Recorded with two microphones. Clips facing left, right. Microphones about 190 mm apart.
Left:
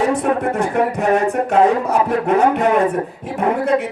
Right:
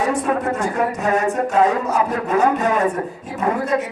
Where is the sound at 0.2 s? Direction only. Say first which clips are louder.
Left 2 dB; 60° left (ahead or behind).